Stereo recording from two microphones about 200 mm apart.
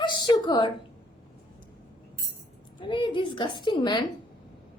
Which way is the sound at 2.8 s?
25° left (ahead or behind).